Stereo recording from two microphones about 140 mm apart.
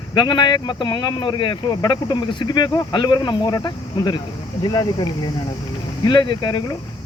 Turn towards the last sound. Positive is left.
turn(degrees=30)  # may be behind; listen again after turning